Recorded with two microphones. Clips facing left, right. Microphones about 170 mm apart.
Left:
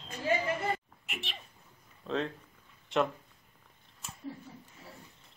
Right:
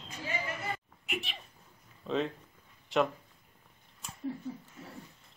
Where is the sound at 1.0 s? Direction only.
Centre (ahead or behind).